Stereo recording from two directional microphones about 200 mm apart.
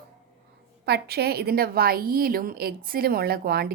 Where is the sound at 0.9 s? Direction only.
55° right (ahead or behind).